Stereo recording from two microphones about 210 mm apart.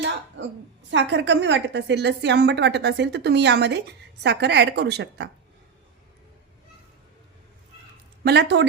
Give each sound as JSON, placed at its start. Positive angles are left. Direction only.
{"t": 0.9, "sound": "a woman's voice", "side_deg": -60}
{"t": 8.2, "sound": "a woman's voice", "side_deg": -55}